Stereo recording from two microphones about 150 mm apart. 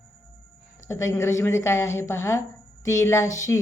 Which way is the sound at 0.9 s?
20° left (ahead or behind).